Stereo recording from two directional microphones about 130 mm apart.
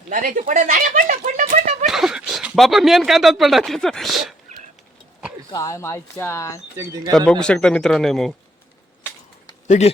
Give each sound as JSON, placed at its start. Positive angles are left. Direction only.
{"t": 0.1, "sound": "speech", "side_deg": -90}
{"t": 1.9, "sound": "speech", "side_deg": -5}
{"t": 5.5, "sound": "speech", "side_deg": 25}
{"t": 6.7, "sound": "speech", "side_deg": -25}
{"t": 7.3, "sound": "speech", "side_deg": 5}
{"t": 9.6, "sound": "speech", "side_deg": 65}